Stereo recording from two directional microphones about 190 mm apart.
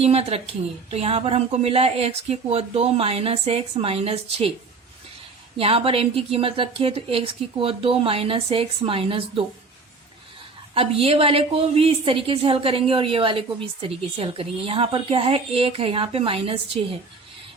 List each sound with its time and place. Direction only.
0.0 s a woman's voice: 30° right (ahead or behind)
5.5 s a woman's voice: 30° right (ahead or behind)
10.8 s a woman's voice: 30° right (ahead or behind)